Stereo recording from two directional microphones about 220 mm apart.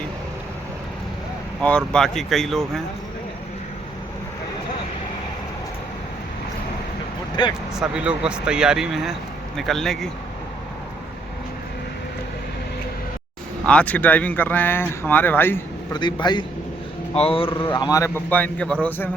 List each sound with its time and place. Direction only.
1.6 s speech: 5° left (ahead or behind)
7.4 s speech: 20° left (ahead or behind)
7.8 s speech: 5° right (ahead or behind)
13.7 s speech: 5° left (ahead or behind)
16.0 s speech: 20° left (ahead or behind)
17.9 s speech: 10° left (ahead or behind)